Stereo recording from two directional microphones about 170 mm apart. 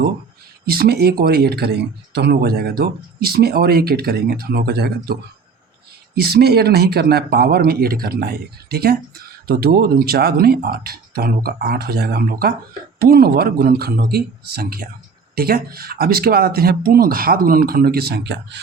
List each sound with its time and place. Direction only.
0.6 s speech: 65° right (ahead or behind)
6.1 s speech: 70° right (ahead or behind); by 18.6 s 90° right